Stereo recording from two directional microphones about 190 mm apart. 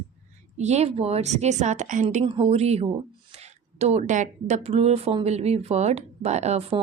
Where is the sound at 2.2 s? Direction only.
30° right (ahead or behind).